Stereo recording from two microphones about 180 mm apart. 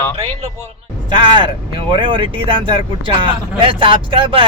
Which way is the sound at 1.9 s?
25° right (ahead or behind).